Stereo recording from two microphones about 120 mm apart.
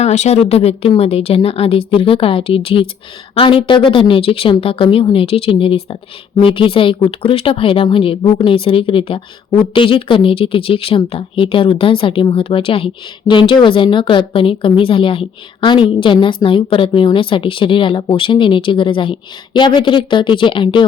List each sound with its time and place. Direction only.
0.0 s a woman's voice: 70° left (ahead or behind); by 20.8 s 45° left (ahead or behind)